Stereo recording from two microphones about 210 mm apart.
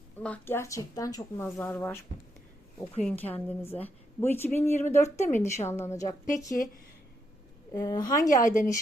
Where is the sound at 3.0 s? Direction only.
5° left (ahead or behind).